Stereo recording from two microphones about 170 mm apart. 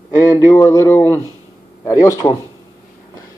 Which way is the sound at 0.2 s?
15° left (ahead or behind).